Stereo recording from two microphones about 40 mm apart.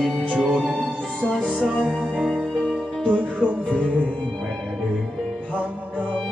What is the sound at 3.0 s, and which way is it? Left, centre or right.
Music, right.